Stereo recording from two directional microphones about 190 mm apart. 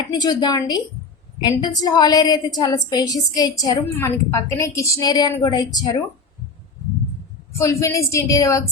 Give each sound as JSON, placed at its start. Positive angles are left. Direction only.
{"t": 0.1, "sound": "a woman's voice", "side_deg": 20}
{"t": 7.6, "sound": "a woman's voice", "side_deg": 15}